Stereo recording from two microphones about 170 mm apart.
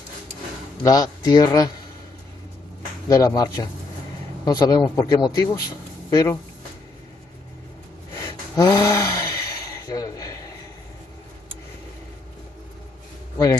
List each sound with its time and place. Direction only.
0.8 s speech: 20° left (ahead or behind)
3.1 s speech: 20° left (ahead or behind)
8.1 s a sound: 20° left (ahead or behind)